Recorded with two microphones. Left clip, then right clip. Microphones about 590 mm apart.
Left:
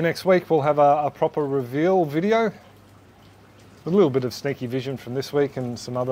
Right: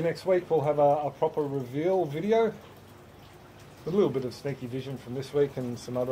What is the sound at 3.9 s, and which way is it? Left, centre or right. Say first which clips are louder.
Speech: left 7 dB; left.